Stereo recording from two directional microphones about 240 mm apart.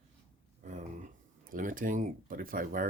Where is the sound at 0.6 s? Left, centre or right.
Right.